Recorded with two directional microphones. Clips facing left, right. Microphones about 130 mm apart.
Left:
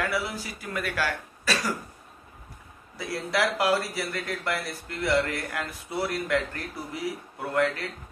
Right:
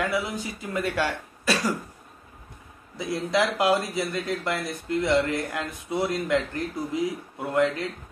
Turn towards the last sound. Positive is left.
turn(degrees=-20)  # may be behind; listen again after turning